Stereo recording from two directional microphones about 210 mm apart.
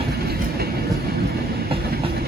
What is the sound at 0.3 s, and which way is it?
Train, 50° right (ahead or behind).